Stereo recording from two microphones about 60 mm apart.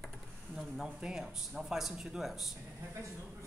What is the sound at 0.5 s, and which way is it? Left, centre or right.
Speech, centre.